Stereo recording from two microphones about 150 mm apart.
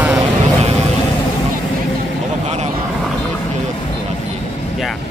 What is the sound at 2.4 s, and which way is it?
Vehicle, 50° right (ahead or behind).